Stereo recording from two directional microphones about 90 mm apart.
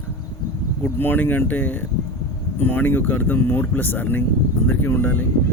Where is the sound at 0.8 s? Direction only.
25° left (ahead or behind).